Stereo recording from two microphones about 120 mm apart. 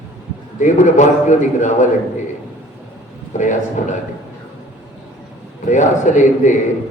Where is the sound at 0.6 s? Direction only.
90° left.